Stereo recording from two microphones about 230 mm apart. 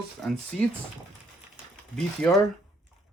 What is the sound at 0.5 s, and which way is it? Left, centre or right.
Speech, centre.